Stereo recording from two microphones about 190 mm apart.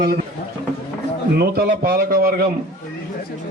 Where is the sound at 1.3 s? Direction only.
55° right (ahead or behind).